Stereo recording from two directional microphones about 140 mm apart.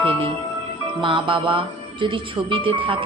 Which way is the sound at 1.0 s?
35° right (ahead or behind).